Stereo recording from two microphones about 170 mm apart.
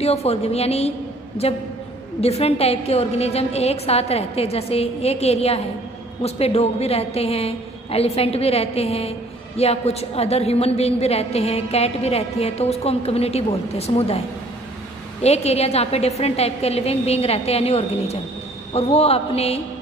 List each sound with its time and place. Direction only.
0.0 s a woman's voice: 40° left (ahead or behind)
15.2 s a woman's voice: 40° left (ahead or behind)